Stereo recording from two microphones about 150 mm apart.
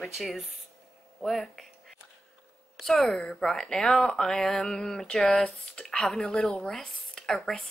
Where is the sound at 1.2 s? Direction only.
Centre (ahead or behind).